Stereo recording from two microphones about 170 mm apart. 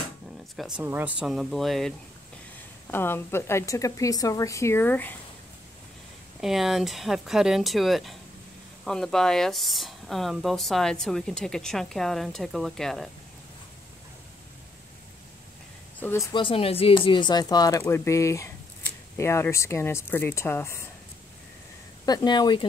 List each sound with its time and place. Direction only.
0.6 s speech: 5° right (ahead or behind)
1.2 s speech: centre (ahead or behind)
2.9 s speech: 15° left (ahead or behind)
6.4 s speech: centre (ahead or behind)
16.0 s speech: 15° left (ahead or behind)
16.4 s speech: 35° left (ahead or behind); by 20.9 s 15° left (ahead or behind)
22.0 s speech: 25° left (ahead or behind)